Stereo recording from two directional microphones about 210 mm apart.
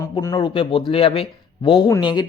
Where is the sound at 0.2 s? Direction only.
20° left (ahead or behind).